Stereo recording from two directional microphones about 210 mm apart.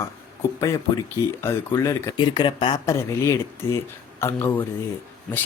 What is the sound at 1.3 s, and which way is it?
Speech, 15° left (ahead or behind).